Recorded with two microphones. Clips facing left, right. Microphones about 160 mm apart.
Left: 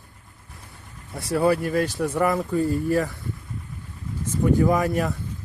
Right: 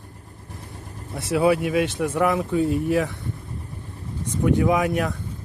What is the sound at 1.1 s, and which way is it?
Speech, centre (ahead or behind).